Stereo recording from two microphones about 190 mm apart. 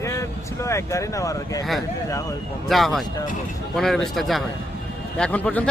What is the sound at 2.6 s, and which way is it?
Speech, centre (ahead or behind).